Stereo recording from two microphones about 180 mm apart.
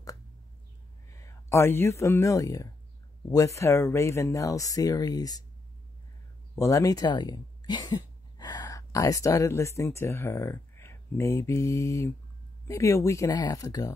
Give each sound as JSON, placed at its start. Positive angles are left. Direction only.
{"t": 1.1, "sound": "speech", "side_deg": 15}
{"t": 6.5, "sound": "speech", "side_deg": 20}